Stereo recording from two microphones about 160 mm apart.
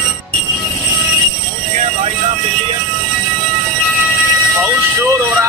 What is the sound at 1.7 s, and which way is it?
Music, 45° right (ahead or behind).